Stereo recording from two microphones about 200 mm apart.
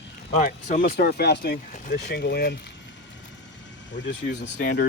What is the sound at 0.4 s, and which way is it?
Speech, 40° left (ahead or behind).